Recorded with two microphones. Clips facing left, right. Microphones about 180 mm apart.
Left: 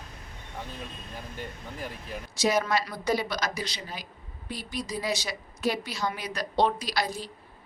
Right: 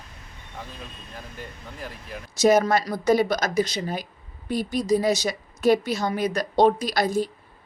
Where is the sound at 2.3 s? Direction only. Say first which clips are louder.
Right 7 dB; 45° right (ahead or behind).